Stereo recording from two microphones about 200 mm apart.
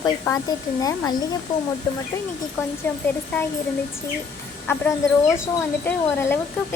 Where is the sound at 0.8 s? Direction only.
15° left (ahead or behind).